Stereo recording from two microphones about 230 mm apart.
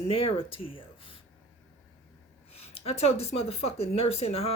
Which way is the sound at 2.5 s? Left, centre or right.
Left.